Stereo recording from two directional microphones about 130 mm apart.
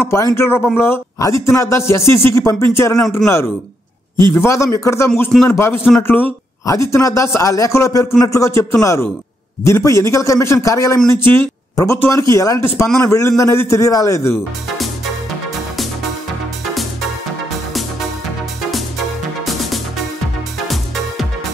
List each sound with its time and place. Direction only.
0.0 s music: 20° left (ahead or behind)
0.7 s speech: 20° left (ahead or behind)
1.4 s music: 20° left (ahead or behind)
4.3 s music: 20° left (ahead or behind)
5.9 s speech: 15° left (ahead or behind)
6.6 s music: 25° left (ahead or behind)
11.7 s speech: 25° left (ahead or behind)
12.0 s music: 20° left (ahead or behind)
20.6 s music: centre (ahead or behind)